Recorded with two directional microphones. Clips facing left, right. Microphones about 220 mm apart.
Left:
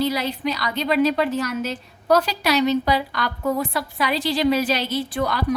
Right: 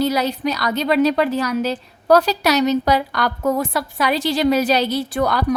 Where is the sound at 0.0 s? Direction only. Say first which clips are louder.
Right 4 dB; 40° right (ahead or behind).